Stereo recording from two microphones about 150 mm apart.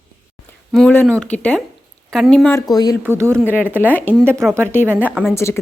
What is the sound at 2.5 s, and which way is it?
Speech, 25° left (ahead or behind).